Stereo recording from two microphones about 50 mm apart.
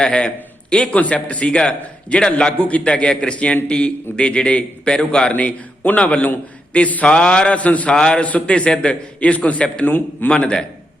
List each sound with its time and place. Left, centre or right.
0.0 s a man's voice: centre
0.9 s a man's voice: left
5.3 s a man's voice: left
7.9 s a man's voice: centre